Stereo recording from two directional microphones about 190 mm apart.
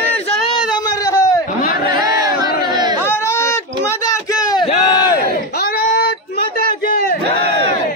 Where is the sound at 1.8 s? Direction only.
20° right (ahead or behind).